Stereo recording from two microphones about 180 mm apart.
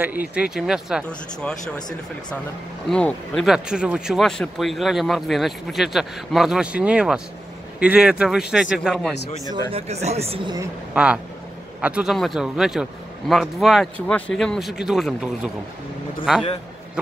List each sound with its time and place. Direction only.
0.3 s speech: 5° right (ahead or behind)
2.9 s speech: 5° left (ahead or behind)
9.5 s speech: 30° right (ahead or behind)
10.9 s speech: 5° right (ahead or behind)